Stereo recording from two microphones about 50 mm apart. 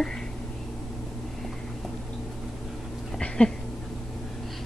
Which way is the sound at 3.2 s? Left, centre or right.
Centre.